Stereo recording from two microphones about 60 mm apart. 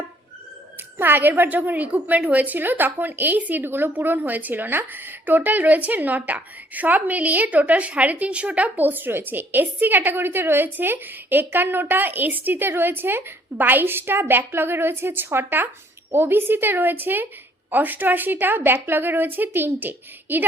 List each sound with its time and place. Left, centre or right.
0.9 s a woman's voice: right